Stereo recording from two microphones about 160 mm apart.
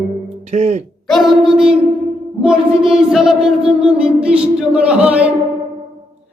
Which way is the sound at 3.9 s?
5° right (ahead or behind).